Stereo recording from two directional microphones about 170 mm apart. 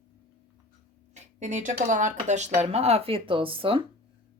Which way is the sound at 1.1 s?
45° right (ahead or behind).